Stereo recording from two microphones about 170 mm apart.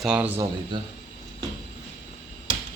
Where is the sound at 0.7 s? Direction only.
30° right (ahead or behind).